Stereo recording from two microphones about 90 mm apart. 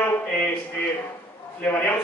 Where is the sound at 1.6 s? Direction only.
20° left (ahead or behind).